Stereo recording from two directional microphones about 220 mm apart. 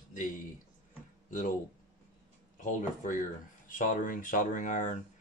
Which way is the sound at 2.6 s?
35° left (ahead or behind).